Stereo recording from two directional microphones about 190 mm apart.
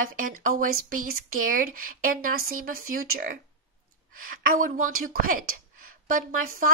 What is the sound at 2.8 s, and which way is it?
Speech, 50° right (ahead or behind).